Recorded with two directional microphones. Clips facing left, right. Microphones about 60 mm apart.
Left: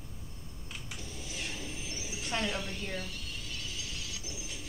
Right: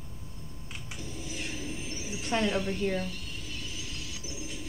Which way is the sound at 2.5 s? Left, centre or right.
Right.